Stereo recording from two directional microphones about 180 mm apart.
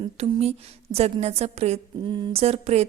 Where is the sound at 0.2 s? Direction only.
35° right (ahead or behind).